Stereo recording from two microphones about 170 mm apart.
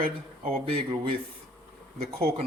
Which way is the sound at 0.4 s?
35° right (ahead or behind).